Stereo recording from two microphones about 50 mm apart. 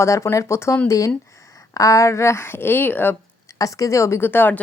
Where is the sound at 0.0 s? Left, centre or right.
Left.